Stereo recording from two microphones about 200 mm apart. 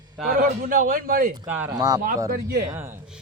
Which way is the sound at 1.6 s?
20° right (ahead or behind).